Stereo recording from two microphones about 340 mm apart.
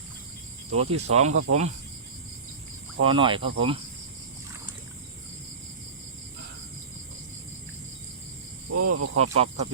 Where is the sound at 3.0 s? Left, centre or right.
Centre.